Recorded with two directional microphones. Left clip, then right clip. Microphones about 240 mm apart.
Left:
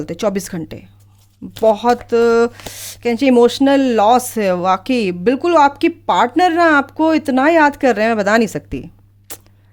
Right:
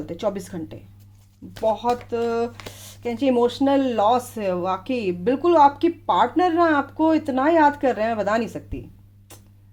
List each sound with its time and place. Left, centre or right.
0.0 s a woman's voice: left
9.3 s music: left